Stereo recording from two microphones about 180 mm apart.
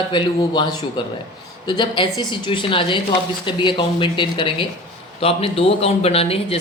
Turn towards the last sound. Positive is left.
turn(degrees=35)  # may be behind; listen again after turning